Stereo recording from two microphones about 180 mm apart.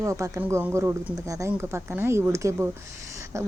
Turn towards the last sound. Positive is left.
turn(degrees=-15)  # may be behind; listen again after turning